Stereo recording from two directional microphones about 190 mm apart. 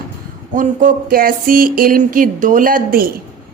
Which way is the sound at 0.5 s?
40° right (ahead or behind).